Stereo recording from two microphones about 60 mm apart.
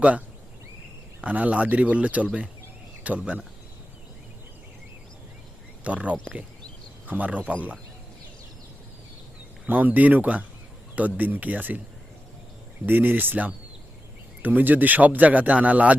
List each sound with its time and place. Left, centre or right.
1.2 s speech: right
5.8 s speech: right
9.6 s speech: right
12.8 s speech: right